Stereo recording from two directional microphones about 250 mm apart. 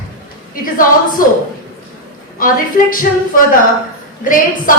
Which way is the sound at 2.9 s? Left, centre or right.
Left.